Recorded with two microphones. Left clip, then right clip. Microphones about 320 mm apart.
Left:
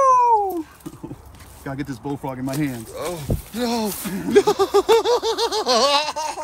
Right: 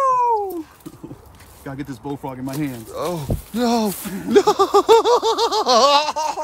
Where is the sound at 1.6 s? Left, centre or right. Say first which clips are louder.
Left 1 dB; centre.